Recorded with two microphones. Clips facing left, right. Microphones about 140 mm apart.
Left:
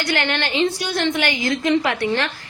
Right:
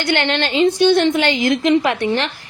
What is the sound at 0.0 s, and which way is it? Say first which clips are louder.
A woman's voice: right 4 dB; 25° right (ahead or behind).